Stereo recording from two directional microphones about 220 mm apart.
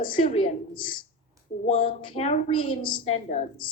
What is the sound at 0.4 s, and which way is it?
A woman's voice, 20° left (ahead or behind).